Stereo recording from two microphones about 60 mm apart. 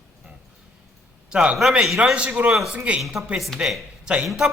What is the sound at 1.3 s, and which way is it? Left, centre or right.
A man's voice, centre.